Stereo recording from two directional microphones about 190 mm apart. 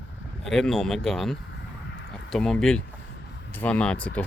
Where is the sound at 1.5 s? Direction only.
65° left (ahead or behind).